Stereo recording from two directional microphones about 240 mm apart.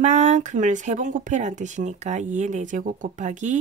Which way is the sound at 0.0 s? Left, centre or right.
Right.